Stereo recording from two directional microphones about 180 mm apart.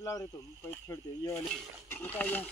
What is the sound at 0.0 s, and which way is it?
Speech, 15° left (ahead or behind).